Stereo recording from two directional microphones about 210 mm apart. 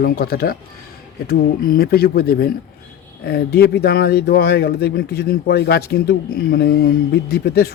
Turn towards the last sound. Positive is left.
turn(degrees=50)  # may be behind; listen again after turning